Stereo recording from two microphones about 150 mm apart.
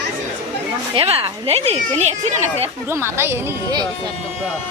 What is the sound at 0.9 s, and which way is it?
Speech, 40° right (ahead or behind).